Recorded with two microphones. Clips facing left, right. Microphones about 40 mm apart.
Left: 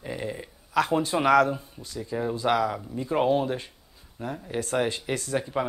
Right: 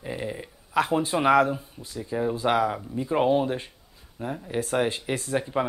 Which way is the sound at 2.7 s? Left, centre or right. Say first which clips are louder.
Right 1 dB; centre.